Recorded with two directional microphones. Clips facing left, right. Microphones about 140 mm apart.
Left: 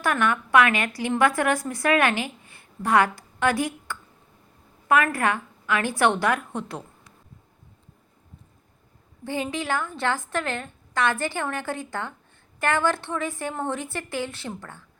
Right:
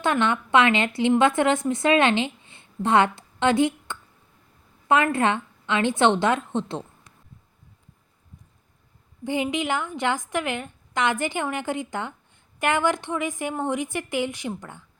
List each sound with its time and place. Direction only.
0.0 s a woman's voice: 25° right (ahead or behind)
9.2 s a woman's voice: 20° right (ahead or behind)